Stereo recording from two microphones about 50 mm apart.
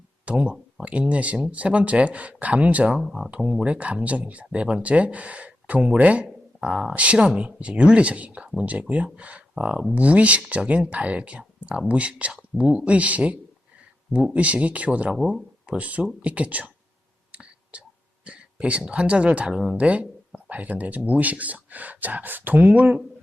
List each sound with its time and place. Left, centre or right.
0.3 s speech: right
3.0 s speech: centre
3.2 s speech: right
15.1 s speech: centre
15.6 s speech: right
17.3 s whispering: right
18.3 s a sound: right
18.9 s speech: right
19.7 s speech: right
22.7 s speech: right